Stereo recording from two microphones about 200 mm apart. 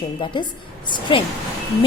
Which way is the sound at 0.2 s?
25° left (ahead or behind).